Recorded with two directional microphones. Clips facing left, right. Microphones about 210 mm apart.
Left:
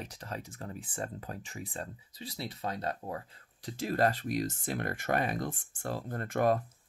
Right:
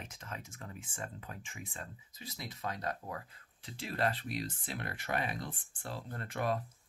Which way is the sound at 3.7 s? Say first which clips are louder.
Left 6 dB; 40° left (ahead or behind).